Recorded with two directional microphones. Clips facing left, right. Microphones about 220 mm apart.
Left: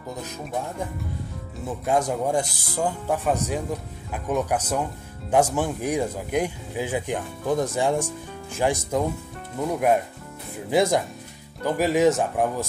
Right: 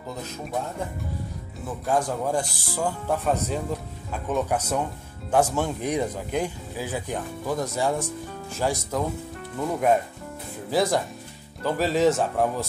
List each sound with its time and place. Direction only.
1.9 s speech: 20° left (ahead or behind)
10.7 s speech: 20° left (ahead or behind)